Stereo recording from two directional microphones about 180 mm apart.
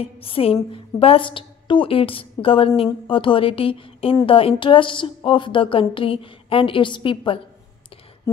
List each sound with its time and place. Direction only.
0.0 s a woman's voice: 30° left (ahead or behind)